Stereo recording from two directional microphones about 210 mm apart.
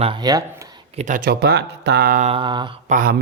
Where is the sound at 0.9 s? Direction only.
35° right (ahead or behind).